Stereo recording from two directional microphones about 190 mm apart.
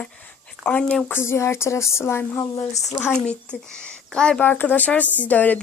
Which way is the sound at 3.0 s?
5° left (ahead or behind).